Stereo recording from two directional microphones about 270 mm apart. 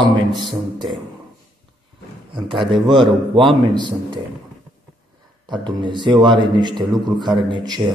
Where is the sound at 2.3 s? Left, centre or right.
Centre.